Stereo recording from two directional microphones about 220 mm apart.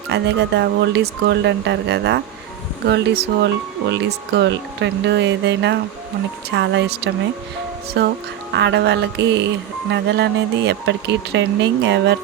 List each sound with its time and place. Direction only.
0.1 s speech: 50° right (ahead or behind)